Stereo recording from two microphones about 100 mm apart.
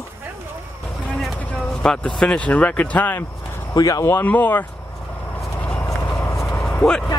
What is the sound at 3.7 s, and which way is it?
Speech, 35° left (ahead or behind).